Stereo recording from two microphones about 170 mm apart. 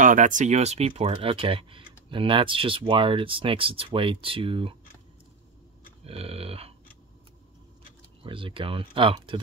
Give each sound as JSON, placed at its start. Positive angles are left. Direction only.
{"t": 0.0, "sound": "speech", "side_deg": -50}
{"t": 6.0, "sound": "speech", "side_deg": -35}
{"t": 8.2, "sound": "speech", "side_deg": -30}